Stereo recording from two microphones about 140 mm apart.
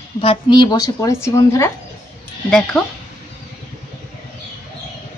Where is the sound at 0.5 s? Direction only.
30° left (ahead or behind).